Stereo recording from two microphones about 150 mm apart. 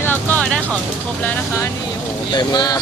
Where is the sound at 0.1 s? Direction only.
10° left (ahead or behind).